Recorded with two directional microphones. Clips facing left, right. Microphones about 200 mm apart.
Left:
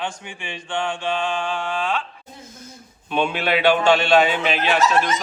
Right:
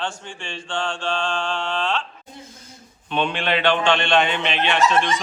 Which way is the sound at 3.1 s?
10° left (ahead or behind).